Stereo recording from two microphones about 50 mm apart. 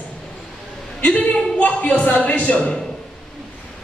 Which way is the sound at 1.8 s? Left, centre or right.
Left.